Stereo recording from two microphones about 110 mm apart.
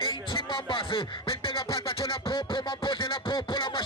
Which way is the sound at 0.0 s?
50° left (ahead or behind).